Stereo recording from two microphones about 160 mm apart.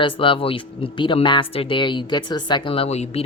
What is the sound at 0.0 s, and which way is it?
Speech, 30° left (ahead or behind).